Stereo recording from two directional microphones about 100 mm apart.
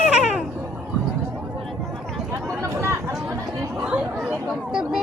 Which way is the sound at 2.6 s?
30° right (ahead or behind).